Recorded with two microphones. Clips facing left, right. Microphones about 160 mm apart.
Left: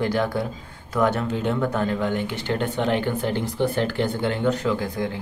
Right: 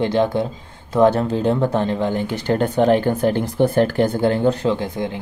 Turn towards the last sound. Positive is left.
turn(degrees=-25)  # may be behind; listen again after turning